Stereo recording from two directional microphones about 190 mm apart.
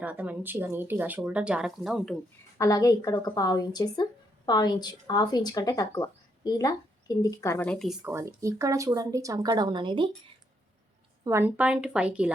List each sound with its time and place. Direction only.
0.0 s speech: 10° right (ahead or behind)
2.6 s speech: 15° left (ahead or behind)
8.0 s speech: 10° right (ahead or behind)
11.2 s speech: 15° right (ahead or behind)